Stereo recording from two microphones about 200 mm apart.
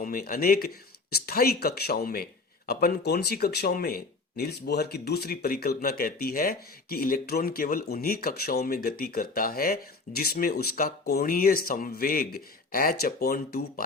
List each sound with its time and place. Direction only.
0.0 s speech: 45° left (ahead or behind)